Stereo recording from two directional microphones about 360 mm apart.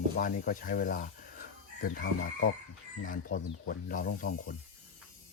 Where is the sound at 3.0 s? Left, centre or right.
Left.